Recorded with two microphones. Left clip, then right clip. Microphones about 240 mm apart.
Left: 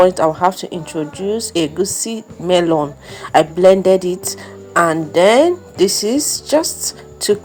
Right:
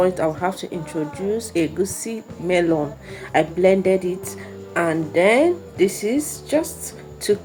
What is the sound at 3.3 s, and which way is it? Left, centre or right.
Speech, left.